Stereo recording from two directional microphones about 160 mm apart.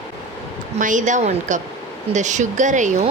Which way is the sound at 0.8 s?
55° right (ahead or behind).